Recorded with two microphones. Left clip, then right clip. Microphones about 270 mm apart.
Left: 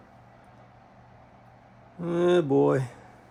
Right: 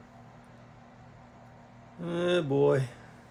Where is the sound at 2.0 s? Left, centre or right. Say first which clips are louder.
Left 5 dB; centre.